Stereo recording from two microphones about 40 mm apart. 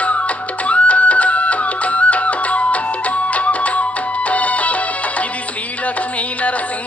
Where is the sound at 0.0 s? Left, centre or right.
Left.